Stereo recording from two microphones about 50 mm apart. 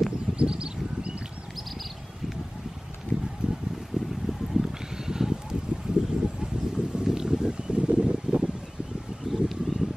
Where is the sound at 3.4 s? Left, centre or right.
Centre.